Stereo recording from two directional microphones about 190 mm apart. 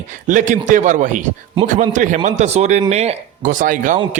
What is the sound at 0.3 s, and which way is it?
A man's voice, 40° right (ahead or behind).